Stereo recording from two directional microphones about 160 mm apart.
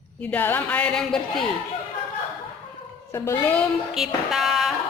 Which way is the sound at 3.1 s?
20° left (ahead or behind).